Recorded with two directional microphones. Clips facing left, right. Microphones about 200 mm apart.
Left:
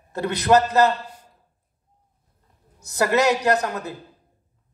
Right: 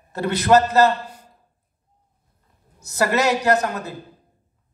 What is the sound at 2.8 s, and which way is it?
A man's voice, 15° left (ahead or behind).